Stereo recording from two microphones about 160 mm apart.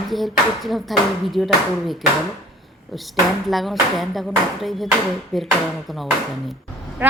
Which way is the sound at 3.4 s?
Centre (ahead or behind).